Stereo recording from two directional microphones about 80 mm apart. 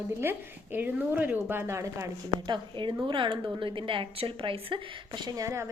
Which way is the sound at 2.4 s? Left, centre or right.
Right.